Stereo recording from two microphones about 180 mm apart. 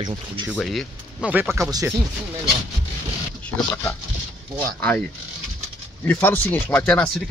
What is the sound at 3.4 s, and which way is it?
Speech, 10° left (ahead or behind).